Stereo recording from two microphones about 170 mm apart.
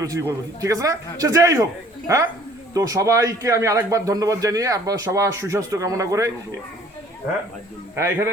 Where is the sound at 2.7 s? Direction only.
20° right (ahead or behind).